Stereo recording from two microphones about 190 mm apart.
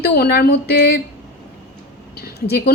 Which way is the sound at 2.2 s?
55° left (ahead or behind).